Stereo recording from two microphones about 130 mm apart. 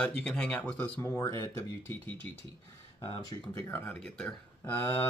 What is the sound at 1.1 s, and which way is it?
Speech, 25° left (ahead or behind).